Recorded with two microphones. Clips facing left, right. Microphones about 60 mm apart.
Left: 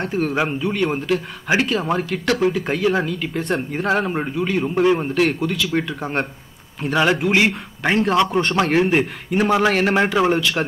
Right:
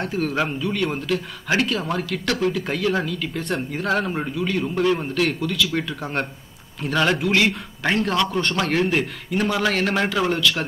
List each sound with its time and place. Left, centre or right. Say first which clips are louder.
0.0 s speech: left 2 dB; centre
5.9 s a man's voice: left 3 dB; centre